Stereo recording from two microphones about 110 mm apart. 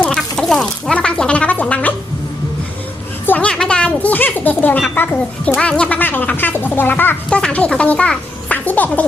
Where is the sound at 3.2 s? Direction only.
10° left (ahead or behind).